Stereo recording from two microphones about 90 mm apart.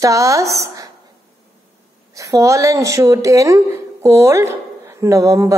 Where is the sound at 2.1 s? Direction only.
35° right (ahead or behind).